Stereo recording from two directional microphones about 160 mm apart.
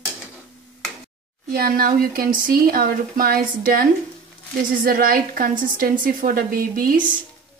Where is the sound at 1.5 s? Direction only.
65° right (ahead or behind).